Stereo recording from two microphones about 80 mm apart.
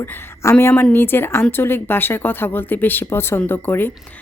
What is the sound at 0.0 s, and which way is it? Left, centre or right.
A woman's voice, left.